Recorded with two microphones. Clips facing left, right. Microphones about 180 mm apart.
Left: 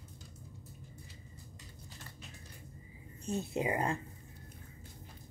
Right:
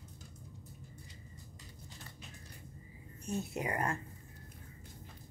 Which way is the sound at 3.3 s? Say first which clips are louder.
Left 3 dB; 25° left (ahead or behind).